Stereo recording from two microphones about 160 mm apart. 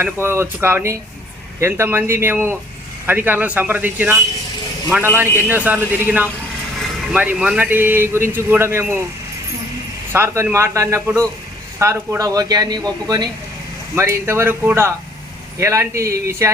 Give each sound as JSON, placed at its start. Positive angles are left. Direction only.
{"t": 0.0, "sound": "speech", "side_deg": -15}
{"t": 10.1, "sound": "a man's voice", "side_deg": -15}